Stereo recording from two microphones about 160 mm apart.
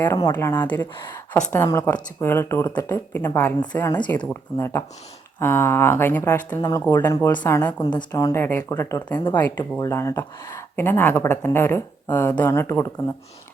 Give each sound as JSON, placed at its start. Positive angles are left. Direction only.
{"t": 0.0, "sound": "speech", "side_deg": 20}
{"t": 6.6, "sound": "speech", "side_deg": 20}
{"t": 7.8, "sound": "speech", "side_deg": 25}